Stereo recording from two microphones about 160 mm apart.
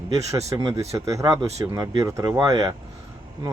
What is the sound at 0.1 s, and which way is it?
Speech, 20° right (ahead or behind).